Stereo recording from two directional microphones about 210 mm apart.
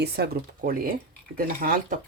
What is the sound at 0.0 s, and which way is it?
Speech, 45° right (ahead or behind).